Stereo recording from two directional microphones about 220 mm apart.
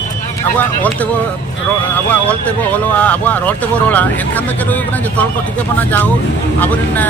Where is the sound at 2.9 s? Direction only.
10° left (ahead or behind).